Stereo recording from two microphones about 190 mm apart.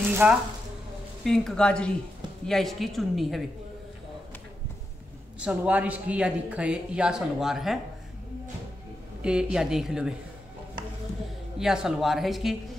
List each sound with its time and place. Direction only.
0.1 s speech: 10° right (ahead or behind)
1.2 s speech: 5° left (ahead or behind)
5.4 s speech: 10° right (ahead or behind)
9.2 s speech: 5° right (ahead or behind)
11.5 s speech: 5° right (ahead or behind)